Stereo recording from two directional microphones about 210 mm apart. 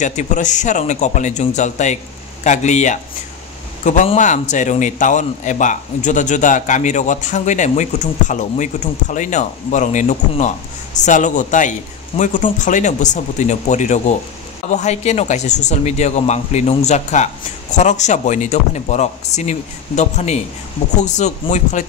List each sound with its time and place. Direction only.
0.0 s a man's voice: 35° left (ahead or behind)